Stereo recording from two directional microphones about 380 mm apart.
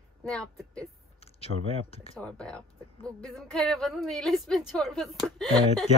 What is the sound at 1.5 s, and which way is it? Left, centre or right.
Speech, right.